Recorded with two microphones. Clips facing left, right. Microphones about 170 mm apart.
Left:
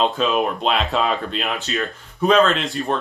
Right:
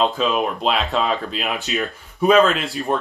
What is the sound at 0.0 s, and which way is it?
Speech, centre (ahead or behind).